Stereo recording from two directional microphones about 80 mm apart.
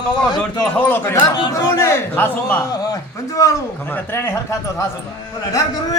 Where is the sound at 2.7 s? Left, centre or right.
Left.